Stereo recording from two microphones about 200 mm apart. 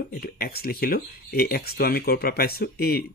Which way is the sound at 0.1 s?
50° left (ahead or behind).